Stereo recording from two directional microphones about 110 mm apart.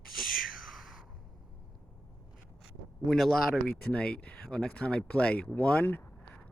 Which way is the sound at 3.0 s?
Centre (ahead or behind).